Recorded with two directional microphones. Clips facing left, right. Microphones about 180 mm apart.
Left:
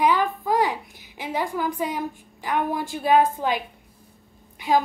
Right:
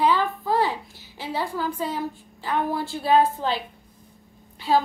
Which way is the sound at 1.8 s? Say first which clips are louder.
Left 1 dB; 15° left (ahead or behind).